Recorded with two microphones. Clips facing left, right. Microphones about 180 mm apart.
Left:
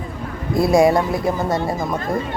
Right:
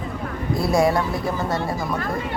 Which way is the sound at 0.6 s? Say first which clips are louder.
Left 5 dB; 15° left (ahead or behind).